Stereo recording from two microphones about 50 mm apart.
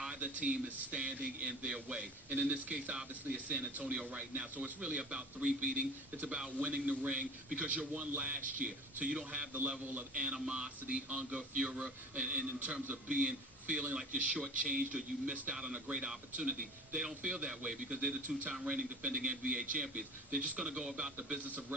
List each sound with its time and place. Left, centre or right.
0.2 s a man's voice: right
6.6 s speech: right
9.5 s a man's voice: right
10.2 s a man's voice: centre
21.3 s a man's voice: right